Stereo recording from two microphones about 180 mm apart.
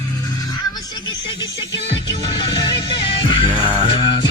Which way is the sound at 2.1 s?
25° left (ahead or behind).